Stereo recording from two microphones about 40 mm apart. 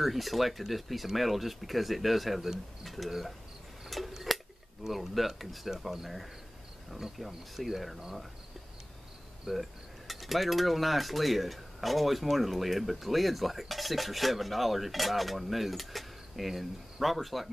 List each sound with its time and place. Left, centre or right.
0.0 s cutlery: centre
3.8 s tick-tock: centre
4.8 s cutlery: centre
9.5 s cutlery: centre